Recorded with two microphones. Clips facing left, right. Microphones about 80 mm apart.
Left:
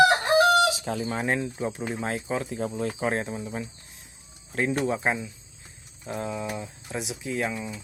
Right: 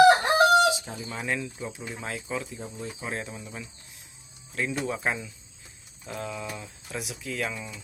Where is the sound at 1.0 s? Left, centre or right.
Left.